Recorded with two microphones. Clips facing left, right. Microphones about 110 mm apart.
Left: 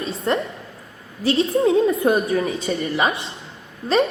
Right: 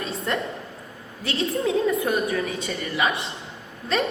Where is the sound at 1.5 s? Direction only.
30° left (ahead or behind).